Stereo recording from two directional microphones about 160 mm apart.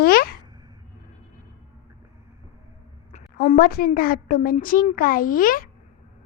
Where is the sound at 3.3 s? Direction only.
65° left (ahead or behind).